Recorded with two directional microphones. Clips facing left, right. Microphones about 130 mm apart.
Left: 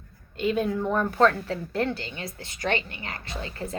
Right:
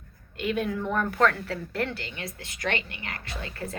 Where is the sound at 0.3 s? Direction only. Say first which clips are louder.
Left 3 dB; 30° left (ahead or behind).